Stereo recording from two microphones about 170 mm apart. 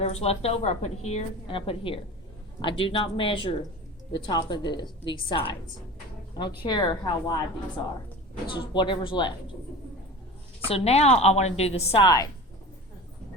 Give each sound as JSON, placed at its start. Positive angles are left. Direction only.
{"t": 0.0, "sound": "a woman's voice", "side_deg": 35}
{"t": 6.7, "sound": "a woman's voice", "side_deg": 25}
{"t": 8.4, "sound": "a woman's voice", "side_deg": 30}
{"t": 10.7, "sound": "a woman's voice", "side_deg": 35}
{"t": 12.0, "sound": "a woman's voice", "side_deg": 20}